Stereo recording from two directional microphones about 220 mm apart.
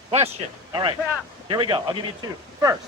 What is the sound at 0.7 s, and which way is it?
Speech, 20° right (ahead or behind).